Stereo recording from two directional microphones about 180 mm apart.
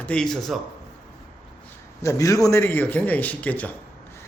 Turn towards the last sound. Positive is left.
turn(degrees=10)  # may be behind; listen again after turning